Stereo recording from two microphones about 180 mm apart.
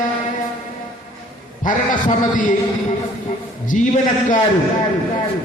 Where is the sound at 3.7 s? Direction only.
40° left (ahead or behind).